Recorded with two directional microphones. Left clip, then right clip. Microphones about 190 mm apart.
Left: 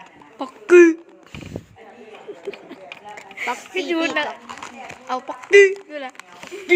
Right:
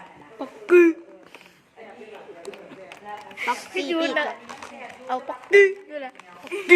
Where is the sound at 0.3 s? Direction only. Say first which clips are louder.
Left 5 dB; 45° left (ahead or behind).